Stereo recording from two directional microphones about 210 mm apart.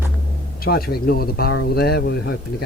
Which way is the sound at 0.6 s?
45° left (ahead or behind).